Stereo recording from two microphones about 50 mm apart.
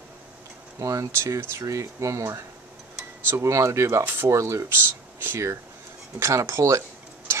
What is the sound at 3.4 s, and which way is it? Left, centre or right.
Speech, right.